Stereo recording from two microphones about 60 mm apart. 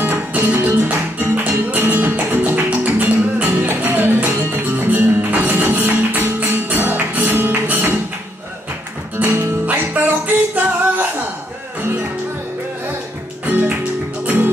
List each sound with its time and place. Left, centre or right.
0.0 s music: right
0.6 s music: right
9.2 s music: right
13.5 s music: right